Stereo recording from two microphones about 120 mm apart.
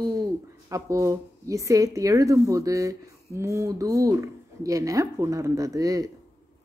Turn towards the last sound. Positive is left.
turn(degrees=-30)  # may be behind; listen again after turning